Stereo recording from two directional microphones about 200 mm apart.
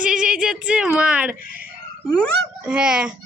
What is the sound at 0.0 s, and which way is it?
Speech, 5° right (ahead or behind).